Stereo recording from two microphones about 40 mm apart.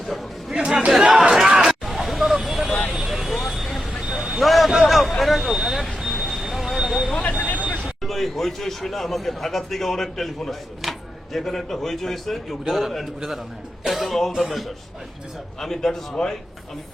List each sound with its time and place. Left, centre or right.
0.1 s chatter: centre
0.5 s chatter: right
1.3 s vehicle: centre
2.9 s vehicle: centre
7.2 s vehicle: left
7.8 s a man's voice: centre